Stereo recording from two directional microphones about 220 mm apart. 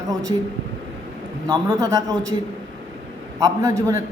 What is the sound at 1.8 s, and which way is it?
Speech, 15° right (ahead or behind).